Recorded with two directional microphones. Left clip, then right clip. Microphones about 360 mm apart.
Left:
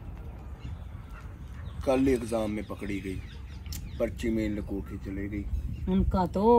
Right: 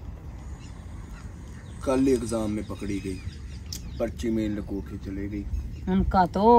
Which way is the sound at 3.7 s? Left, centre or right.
Centre.